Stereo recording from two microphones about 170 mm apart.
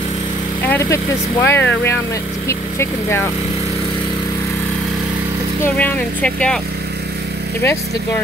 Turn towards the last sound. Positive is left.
turn(degrees=5)  # may be behind; listen again after turning